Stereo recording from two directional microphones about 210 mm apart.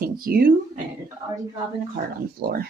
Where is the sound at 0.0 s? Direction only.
45° right (ahead or behind).